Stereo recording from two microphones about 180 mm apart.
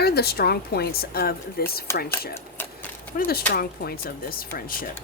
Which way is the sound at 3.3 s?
60° left (ahead or behind).